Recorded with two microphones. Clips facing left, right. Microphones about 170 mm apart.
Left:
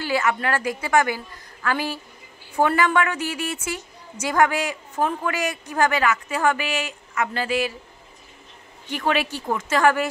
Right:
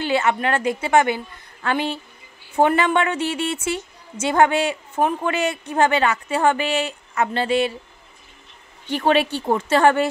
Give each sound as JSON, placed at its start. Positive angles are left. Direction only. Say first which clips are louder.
{"t": 0.0, "sound": "a woman's voice", "louder": "right 3 dB", "side_deg": -25}
{"t": 8.9, "sound": "a woman's voice", "louder": "right 5 dB", "side_deg": -30}